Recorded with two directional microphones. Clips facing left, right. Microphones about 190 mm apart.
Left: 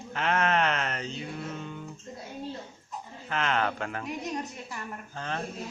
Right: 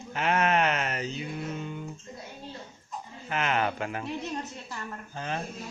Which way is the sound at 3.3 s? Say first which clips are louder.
Even; 10° right (ahead or behind).